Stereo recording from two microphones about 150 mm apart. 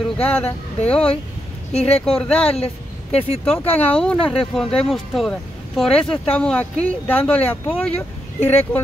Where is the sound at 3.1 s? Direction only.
45° left (ahead or behind).